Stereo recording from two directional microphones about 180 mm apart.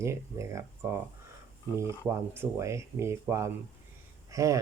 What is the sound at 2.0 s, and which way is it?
Speech, 10° right (ahead or behind).